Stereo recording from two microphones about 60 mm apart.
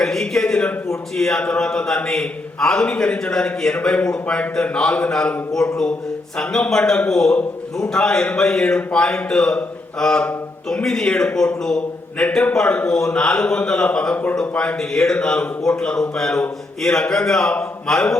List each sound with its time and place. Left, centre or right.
0.0 s a man's voice: centre